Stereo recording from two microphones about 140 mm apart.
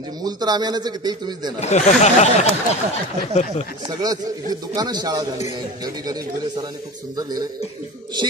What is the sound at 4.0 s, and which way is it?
Music, 25° right (ahead or behind).